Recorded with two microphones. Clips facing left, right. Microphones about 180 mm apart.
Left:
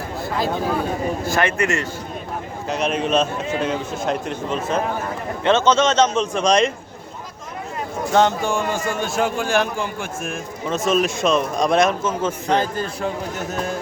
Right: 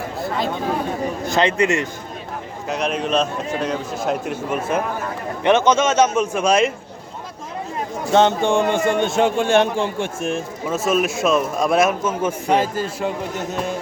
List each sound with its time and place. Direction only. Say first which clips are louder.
0.2 s a sound: even; centre (ahead or behind)
1.2 s a man's voice: right 5 dB; 20° right (ahead or behind)
2.6 s a man's voice: left 1 dB; centre (ahead or behind)
8.1 s a man's voice: right 3 dB; 25° right (ahead or behind)
10.7 s a man's voice: even; 5° right (ahead or behind)